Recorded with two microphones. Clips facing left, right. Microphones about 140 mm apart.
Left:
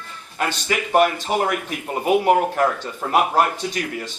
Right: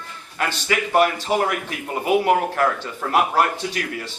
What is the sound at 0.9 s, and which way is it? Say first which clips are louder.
Speech: left 1 dB; 20° left (ahead or behind).